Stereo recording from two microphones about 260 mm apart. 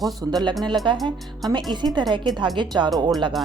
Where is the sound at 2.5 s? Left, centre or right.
Centre.